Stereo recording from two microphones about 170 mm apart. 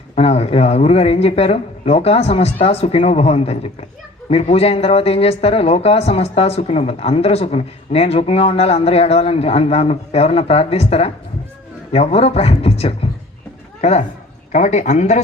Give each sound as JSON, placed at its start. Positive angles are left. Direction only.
{"t": 0.2, "sound": "speech", "side_deg": 35}